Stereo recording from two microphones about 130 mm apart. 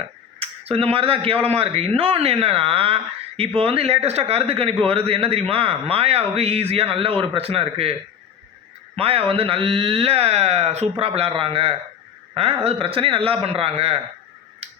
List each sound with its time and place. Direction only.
0.3 s speech: 50° right (ahead or behind)
9.0 s speech: 45° right (ahead or behind)
14.6 s finger snapping: 50° right (ahead or behind)